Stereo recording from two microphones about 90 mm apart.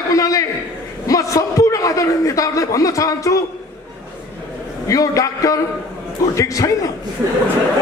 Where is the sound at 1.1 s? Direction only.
40° left (ahead or behind).